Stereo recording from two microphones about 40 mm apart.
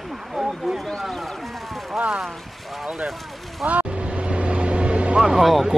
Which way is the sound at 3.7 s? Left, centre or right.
Right.